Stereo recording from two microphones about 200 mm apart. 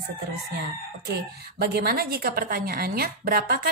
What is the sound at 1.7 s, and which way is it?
A woman's voice, 50° right (ahead or behind).